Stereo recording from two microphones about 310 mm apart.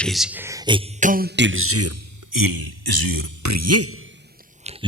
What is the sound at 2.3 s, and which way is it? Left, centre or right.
Speech, right.